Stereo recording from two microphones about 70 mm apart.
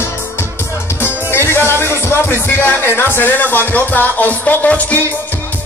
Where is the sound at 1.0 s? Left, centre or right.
Left.